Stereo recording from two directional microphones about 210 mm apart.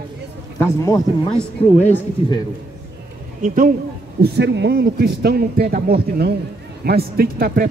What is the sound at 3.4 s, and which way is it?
Speech, 40° right (ahead or behind).